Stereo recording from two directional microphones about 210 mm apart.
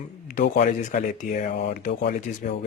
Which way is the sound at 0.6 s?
30° left (ahead or behind).